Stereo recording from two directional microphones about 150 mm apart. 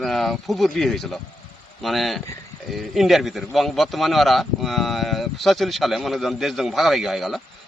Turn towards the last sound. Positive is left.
turn(degrees=0)  # may be behind; listen again after turning